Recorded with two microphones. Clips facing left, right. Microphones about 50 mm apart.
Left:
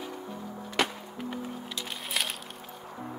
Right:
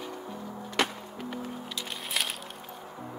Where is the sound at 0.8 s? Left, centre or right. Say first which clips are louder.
Even; centre.